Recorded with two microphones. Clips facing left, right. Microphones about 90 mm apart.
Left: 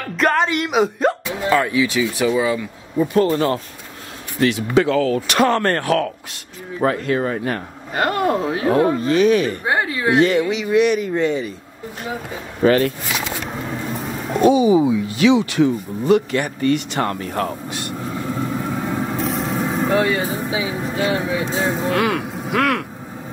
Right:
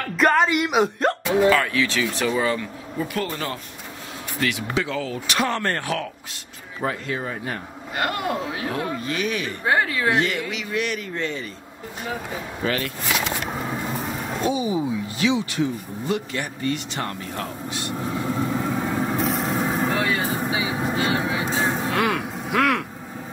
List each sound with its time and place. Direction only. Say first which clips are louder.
0.1 s speech: left 1 dB; centre (ahead or behind)
1.5 s speech: left 3 dB; 20° left (ahead or behind)
3.1 s speech: left 14 dB; 30° left (ahead or behind)
4.7 s speech: left 10 dB; 60° left (ahead or behind)
7.9 s speech: left 6 dB; 40° left (ahead or behind)
9.7 s speech: right 3 dB; 20° left (ahead or behind)
10.1 s speech: left 12 dB; 30° left (ahead or behind)
10.4 s speech: left 10 dB; 20° left (ahead or behind)
12.6 s speech: left 11 dB; 40° left (ahead or behind)
14.4 s speech: left 10 dB; 80° left; by 17.9 s 55° left (ahead or behind)
17.9 s vehicle: even; centre (ahead or behind)